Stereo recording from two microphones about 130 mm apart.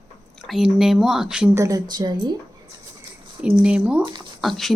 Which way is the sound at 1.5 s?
25° right (ahead or behind).